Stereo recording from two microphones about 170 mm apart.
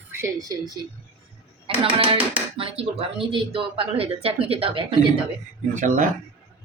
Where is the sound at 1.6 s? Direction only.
30° right (ahead or behind).